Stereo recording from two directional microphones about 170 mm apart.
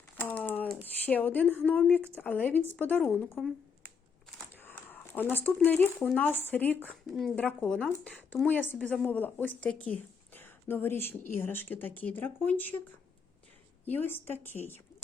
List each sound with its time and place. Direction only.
0.2 s a sound: 10° left (ahead or behind)
1.0 s a woman's voice: 10° left (ahead or behind)
3.3 s finger snapping: centre (ahead or behind)
4.5 s a sound: 10° left (ahead or behind)
6.0 s a woman's voice: 5° left (ahead or behind)
6.7 s speech: 10° right (ahead or behind)
7.2 s a woman's voice: 5° left (ahead or behind)
13.8 s a woman's voice: 10° left (ahead or behind)